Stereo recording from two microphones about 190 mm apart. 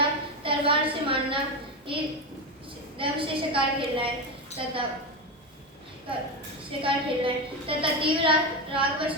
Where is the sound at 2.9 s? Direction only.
25° right (ahead or behind).